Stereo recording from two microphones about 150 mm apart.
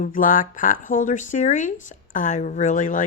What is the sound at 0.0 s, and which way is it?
Speech, 60° left (ahead or behind).